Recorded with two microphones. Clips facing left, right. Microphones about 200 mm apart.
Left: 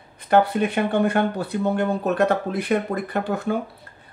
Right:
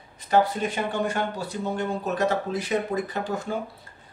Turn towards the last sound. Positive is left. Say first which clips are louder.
# left 5 dB
turn(degrees=60)  # may be behind; listen again after turning